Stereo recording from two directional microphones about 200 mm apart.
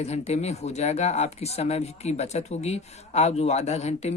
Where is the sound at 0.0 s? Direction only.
35° left (ahead or behind).